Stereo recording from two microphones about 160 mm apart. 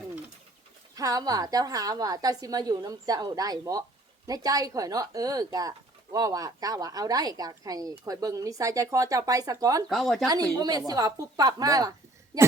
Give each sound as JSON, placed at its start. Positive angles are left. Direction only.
{"t": 0.9, "sound": "speech", "side_deg": -20}
{"t": 9.9, "sound": "speech", "side_deg": 0}
{"t": 10.2, "sound": "speech", "side_deg": -25}